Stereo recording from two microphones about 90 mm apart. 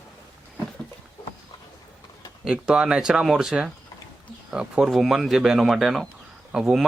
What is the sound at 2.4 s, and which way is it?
Speech, 5° right (ahead or behind).